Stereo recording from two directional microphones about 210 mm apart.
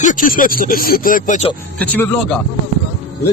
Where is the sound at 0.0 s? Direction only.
40° left (ahead or behind).